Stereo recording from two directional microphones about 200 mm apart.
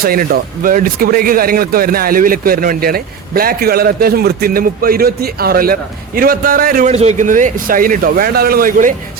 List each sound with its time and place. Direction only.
0.0 s speech: 50° right (ahead or behind)